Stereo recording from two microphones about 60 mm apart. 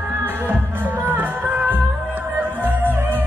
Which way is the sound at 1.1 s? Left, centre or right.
Right.